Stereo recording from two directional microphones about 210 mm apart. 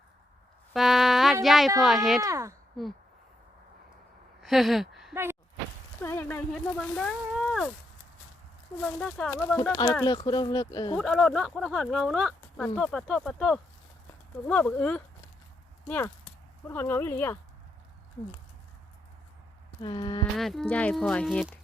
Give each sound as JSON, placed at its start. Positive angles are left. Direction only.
{"t": 0.7, "sound": "a sound", "side_deg": 0}
{"t": 2.2, "sound": "speech", "side_deg": -15}
{"t": 4.4, "sound": "speech", "side_deg": 0}
{"t": 5.1, "sound": "speech", "side_deg": -10}
{"t": 6.0, "sound": "speech", "side_deg": 10}
{"t": 8.8, "sound": "speech", "side_deg": 5}
{"t": 10.0, "sound": "speech", "side_deg": 20}
{"t": 10.9, "sound": "speech", "side_deg": 0}
{"t": 19.8, "sound": "speech", "side_deg": 20}
{"t": 20.3, "sound": "speech", "side_deg": 0}